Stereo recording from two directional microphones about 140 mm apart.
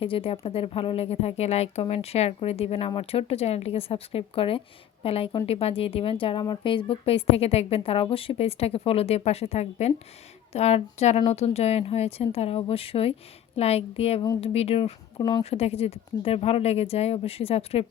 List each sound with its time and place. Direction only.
0.0 s a woman's voice: 40° left (ahead or behind)
15.2 s a woman's voice: 30° left (ahead or behind)
15.4 s speech: 45° left (ahead or behind)